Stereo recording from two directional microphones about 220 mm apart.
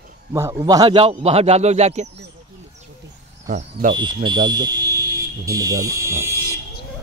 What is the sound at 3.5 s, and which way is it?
Speech, 35° right (ahead or behind).